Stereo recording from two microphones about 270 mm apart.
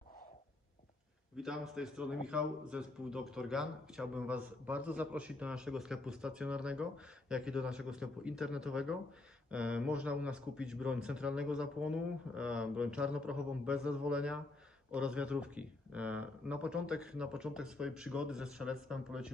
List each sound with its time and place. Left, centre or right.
1.3 s a man's voice: centre